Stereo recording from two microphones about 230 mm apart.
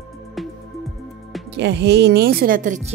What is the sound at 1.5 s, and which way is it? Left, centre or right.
Speech, right.